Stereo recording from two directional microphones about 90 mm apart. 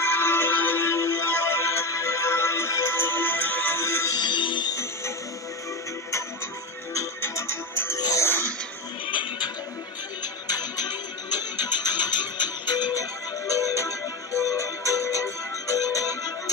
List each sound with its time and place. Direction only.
0.0 s music: 25° left (ahead or behind)
4.2 s music: 65° left (ahead or behind)
6.9 s music: 35° left (ahead or behind)
9.0 s music: 65° left (ahead or behind)
10.5 s music: 50° left (ahead or behind)
13.7 s music: 35° left (ahead or behind)